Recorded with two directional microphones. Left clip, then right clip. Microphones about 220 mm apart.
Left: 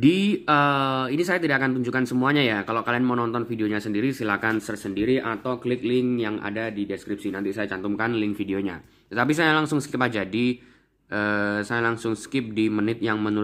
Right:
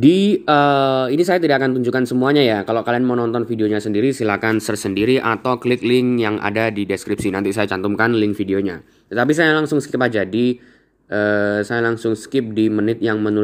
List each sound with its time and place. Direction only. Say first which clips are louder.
0.0 s speech: right 7 dB; 5° right (ahead or behind)
9.1 s speech: right 6 dB; centre (ahead or behind)